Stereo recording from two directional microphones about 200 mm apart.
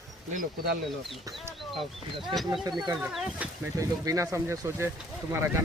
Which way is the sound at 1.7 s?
25° right (ahead or behind).